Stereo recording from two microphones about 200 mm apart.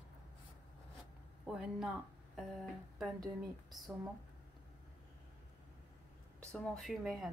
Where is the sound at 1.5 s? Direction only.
5° right (ahead or behind).